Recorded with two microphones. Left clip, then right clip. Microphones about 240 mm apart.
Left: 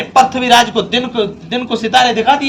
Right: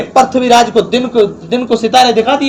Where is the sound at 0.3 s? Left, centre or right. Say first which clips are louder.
Right 2 dB; left.